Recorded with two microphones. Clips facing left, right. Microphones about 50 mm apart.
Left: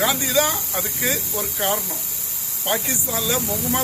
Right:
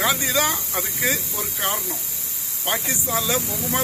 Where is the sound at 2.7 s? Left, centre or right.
Right.